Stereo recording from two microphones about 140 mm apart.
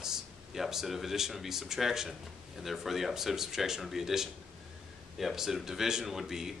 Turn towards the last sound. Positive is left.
turn(degrees=-5)  # may be behind; listen again after turning